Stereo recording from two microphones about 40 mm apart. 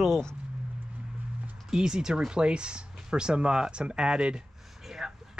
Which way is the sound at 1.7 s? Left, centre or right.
Centre.